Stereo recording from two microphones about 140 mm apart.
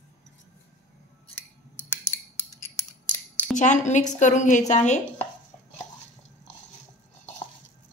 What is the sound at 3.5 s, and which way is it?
A woman's voice, 60° left (ahead or behind).